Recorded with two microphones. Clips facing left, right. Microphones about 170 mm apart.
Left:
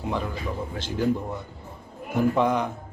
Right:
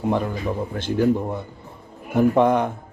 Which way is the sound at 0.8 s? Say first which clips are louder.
Right 5 dB; 55° right (ahead or behind).